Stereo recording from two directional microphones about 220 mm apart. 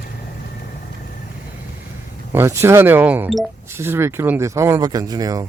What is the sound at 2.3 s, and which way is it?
Speech, 10° right (ahead or behind).